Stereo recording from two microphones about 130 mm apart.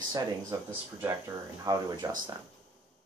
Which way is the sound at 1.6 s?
30° right (ahead or behind).